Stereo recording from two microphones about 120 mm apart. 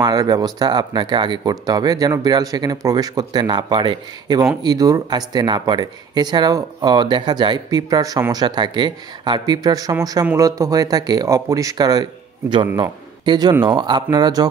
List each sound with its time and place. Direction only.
0.0 s speech: 35° right (ahead or behind)